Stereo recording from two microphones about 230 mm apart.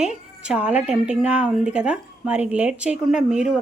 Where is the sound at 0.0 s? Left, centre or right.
Centre.